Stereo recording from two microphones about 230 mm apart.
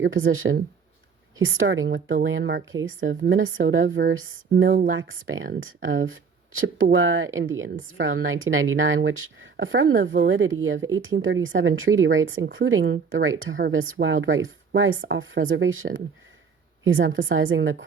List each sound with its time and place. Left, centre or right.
0.0 s speech: right